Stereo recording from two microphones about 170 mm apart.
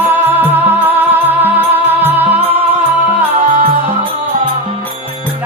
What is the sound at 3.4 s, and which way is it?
Music, 55° right (ahead or behind).